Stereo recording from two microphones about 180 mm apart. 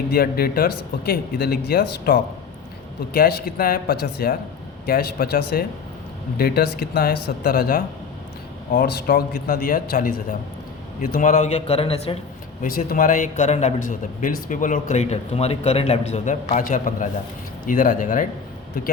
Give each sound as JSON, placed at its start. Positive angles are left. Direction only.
{"t": 0.1, "sound": "speech", "side_deg": 55}
{"t": 11.6, "sound": "speech", "side_deg": 35}
{"t": 12.6, "sound": "speech", "side_deg": 50}